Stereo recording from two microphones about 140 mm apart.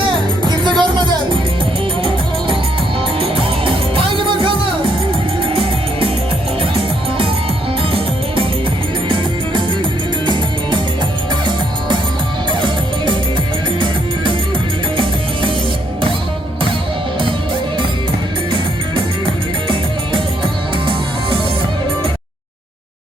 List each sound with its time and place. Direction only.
0.4 s music: 30° right (ahead or behind)
3.2 s music: 40° right (ahead or behind)